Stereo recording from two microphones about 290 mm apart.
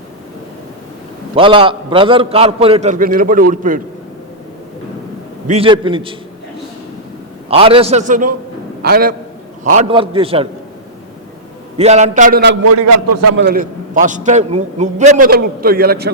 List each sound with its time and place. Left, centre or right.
1.4 s a man's voice: centre
5.5 s a man's voice: centre
7.4 s a man's voice: centre
9.6 s a man's voice: right
11.8 s a man's voice: right
12.9 s a man's voice: right
13.3 s a man's voice: right